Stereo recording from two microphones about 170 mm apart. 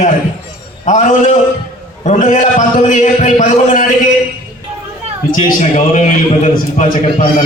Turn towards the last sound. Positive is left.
turn(degrees=45)  # may be behind; listen again after turning